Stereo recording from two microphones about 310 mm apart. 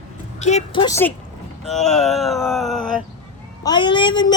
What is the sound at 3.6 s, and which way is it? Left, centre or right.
Speech, centre.